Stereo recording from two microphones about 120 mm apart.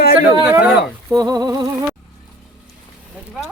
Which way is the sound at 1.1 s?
30° right (ahead or behind).